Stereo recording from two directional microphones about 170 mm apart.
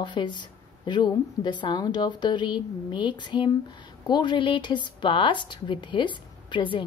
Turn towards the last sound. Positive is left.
turn(degrees=30)  # may be behind; listen again after turning